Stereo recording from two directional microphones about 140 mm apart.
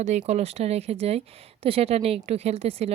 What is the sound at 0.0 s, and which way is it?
Speech, 55° right (ahead or behind).